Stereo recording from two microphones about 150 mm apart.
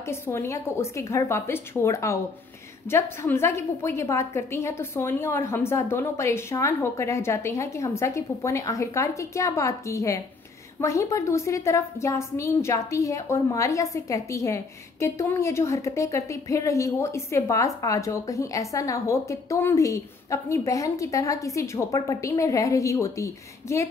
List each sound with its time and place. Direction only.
0.1 s a woman's voice: 15° left (ahead or behind)